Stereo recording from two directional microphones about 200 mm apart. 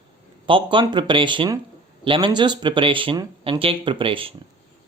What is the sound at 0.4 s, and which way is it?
Speech, 25° right (ahead or behind).